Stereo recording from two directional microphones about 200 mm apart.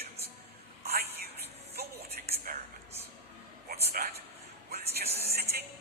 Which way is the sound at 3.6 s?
50° right (ahead or behind).